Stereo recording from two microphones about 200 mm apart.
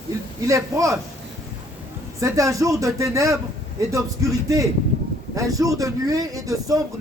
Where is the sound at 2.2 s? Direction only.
15° right (ahead or behind).